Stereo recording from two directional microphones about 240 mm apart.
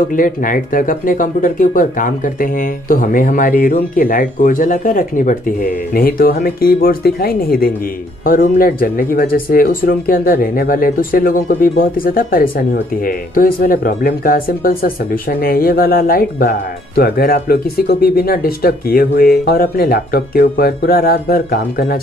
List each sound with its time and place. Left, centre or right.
0.1 s speech: left